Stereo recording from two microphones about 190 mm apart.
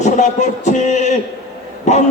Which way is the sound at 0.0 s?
40° left (ahead or behind).